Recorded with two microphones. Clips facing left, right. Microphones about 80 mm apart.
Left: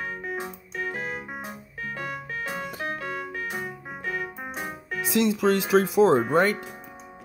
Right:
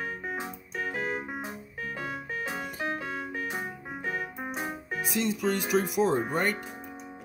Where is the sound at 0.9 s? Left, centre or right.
Centre.